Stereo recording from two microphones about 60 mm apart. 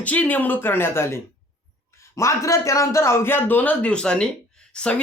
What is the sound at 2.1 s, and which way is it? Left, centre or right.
A man's voice, left.